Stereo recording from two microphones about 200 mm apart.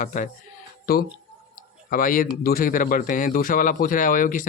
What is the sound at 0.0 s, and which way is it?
Speech, 40° left (ahead or behind).